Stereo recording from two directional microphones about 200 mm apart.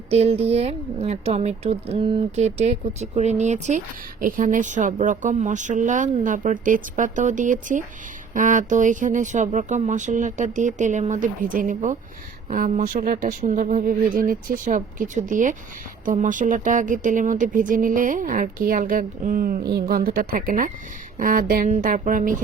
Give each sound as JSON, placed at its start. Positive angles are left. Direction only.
{"t": 0.1, "sound": "speech", "side_deg": -30}